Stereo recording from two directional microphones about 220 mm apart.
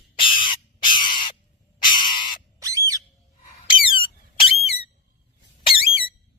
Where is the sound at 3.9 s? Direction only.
25° left (ahead or behind).